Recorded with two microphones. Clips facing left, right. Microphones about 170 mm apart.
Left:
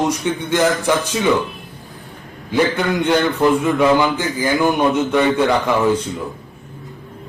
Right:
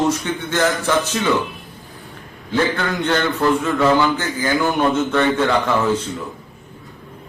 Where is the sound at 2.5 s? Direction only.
15° left (ahead or behind).